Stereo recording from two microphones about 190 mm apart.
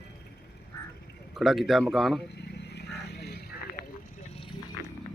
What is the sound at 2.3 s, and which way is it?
Vehicle, 60° left (ahead or behind).